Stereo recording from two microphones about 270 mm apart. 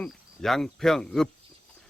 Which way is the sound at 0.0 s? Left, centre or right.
Centre.